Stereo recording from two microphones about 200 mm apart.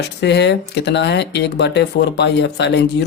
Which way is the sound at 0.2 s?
60° left (ahead or behind).